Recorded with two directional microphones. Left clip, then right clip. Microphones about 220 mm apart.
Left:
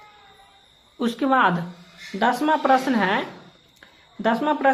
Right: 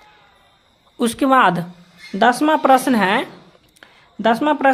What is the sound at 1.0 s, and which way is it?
Speech, 40° right (ahead or behind).